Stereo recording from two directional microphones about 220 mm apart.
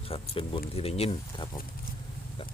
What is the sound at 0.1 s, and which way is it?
Speech, 25° left (ahead or behind).